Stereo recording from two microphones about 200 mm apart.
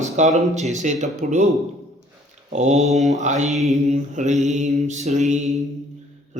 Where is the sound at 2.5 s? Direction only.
35° right (ahead or behind).